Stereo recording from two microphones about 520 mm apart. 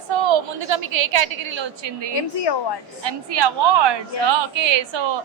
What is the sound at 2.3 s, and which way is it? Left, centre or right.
Speech, left.